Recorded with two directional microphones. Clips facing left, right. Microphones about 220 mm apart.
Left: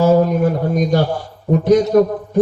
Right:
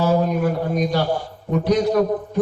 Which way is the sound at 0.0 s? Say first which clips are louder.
Left 6 dB; 45° left (ahead or behind).